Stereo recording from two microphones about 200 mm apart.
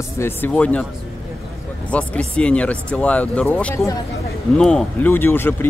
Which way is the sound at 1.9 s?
5° left (ahead or behind).